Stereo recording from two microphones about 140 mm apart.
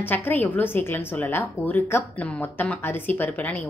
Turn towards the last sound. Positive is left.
turn(degrees=10)  # may be behind; listen again after turning